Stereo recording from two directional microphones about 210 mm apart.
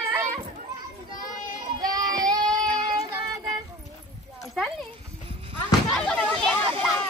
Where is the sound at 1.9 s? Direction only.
20° right (ahead or behind).